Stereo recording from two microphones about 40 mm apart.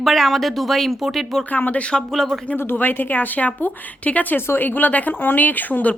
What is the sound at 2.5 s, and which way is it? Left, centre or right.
Speech, left.